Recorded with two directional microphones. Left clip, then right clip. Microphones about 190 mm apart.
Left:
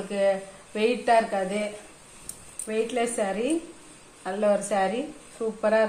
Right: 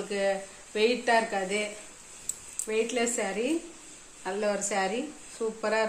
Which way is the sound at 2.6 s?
20° right (ahead or behind).